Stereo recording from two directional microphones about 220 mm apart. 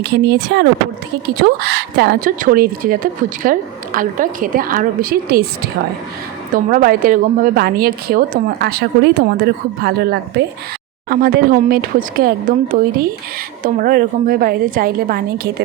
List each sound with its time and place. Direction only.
0.0 s a woman's voice: 50° right (ahead or behind)